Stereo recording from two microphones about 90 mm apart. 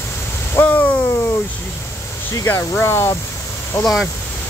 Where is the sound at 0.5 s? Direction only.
20° left (ahead or behind).